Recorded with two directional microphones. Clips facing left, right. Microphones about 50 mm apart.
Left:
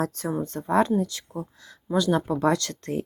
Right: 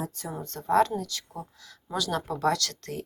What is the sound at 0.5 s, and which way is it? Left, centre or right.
Speech, centre.